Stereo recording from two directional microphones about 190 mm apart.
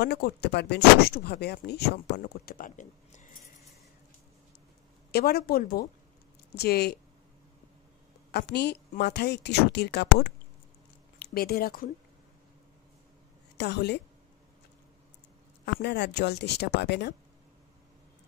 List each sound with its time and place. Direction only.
0.0 s speech: 60° left (ahead or behind); by 3.4 s 45° left (ahead or behind)
5.1 s speech: 55° left (ahead or behind)
8.3 s speech: 60° left (ahead or behind)
13.6 s speech: 60° left (ahead or behind)
15.6 s speech: 60° left (ahead or behind)